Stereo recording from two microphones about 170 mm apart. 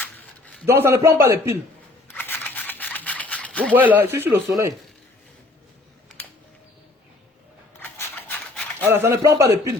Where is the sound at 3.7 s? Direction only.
10° right (ahead or behind).